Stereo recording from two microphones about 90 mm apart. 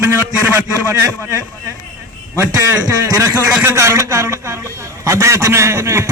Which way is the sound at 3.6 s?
30° right (ahead or behind).